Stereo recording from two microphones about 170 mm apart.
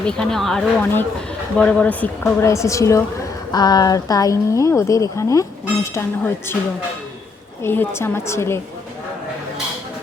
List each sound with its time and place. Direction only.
0.0 s a woman's voice: 5° left (ahead or behind)
7.6 s a woman's voice: 15° left (ahead or behind)